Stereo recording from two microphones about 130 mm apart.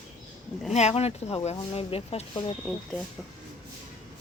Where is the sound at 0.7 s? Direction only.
55° left (ahead or behind).